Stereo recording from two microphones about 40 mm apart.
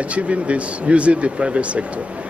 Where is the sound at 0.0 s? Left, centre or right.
Right.